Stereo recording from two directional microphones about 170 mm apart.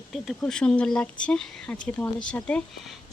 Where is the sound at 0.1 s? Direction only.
Centre (ahead or behind).